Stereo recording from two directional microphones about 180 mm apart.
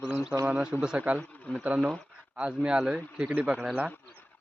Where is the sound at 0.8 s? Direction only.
5° right (ahead or behind).